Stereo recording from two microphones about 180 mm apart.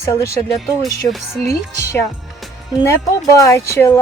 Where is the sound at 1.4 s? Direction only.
15° left (ahead or behind).